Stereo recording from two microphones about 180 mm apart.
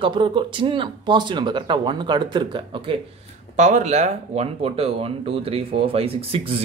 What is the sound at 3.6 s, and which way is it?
Speech, 40° right (ahead or behind).